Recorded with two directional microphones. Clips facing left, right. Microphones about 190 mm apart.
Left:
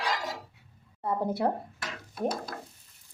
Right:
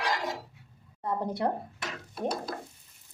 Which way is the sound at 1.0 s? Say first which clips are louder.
Left 2 dB; 5° left (ahead or behind).